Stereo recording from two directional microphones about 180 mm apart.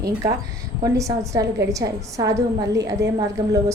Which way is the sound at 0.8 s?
15° right (ahead or behind).